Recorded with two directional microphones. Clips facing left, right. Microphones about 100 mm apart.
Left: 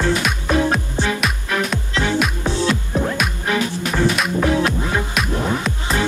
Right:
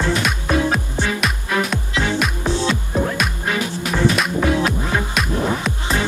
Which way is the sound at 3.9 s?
Centre (ahead or behind).